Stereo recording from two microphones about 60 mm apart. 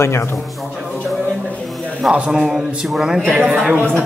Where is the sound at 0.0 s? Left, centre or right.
Left.